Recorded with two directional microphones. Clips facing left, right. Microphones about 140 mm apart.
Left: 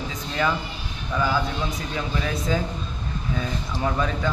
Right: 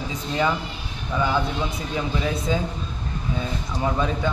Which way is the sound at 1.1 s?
20° right (ahead or behind).